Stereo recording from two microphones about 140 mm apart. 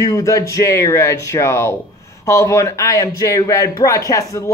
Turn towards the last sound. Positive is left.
turn(degrees=20)  # may be behind; listen again after turning